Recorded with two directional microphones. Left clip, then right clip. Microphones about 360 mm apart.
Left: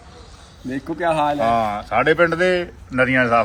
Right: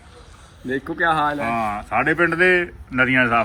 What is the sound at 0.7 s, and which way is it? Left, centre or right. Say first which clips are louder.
Speech: right 1 dB; centre.